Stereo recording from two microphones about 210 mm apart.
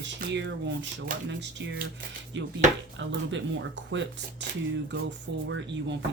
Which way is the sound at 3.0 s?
60° right (ahead or behind).